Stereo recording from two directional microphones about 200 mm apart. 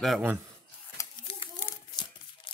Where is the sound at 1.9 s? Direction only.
20° left (ahead or behind).